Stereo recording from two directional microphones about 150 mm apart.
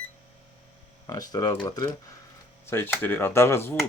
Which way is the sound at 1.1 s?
25° left (ahead or behind).